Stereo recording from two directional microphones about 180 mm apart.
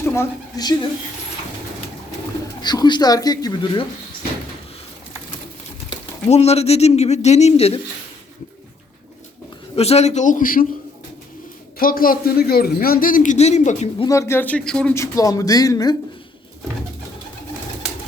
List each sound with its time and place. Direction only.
0.0 s a woman's voice: 15° left (ahead or behind)
2.6 s speech: 25° left (ahead or behind)
5.9 s speech: 35° left (ahead or behind)
9.7 s speech: 35° left (ahead or behind); by 10.7 s 50° left (ahead or behind)
11.8 s speech: 55° left (ahead or behind)
14.1 s speech: 15° left (ahead or behind)